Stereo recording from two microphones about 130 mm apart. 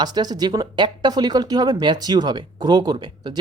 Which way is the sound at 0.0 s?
30° right (ahead or behind).